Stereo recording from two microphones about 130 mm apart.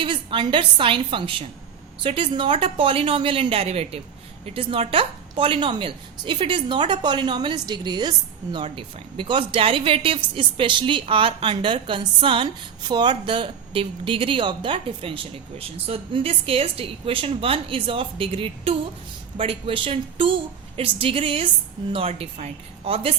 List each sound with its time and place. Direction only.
0.0 s a woman's voice: 40° right (ahead or behind)